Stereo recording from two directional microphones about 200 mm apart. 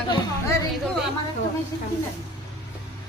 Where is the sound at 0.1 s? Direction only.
15° left (ahead or behind).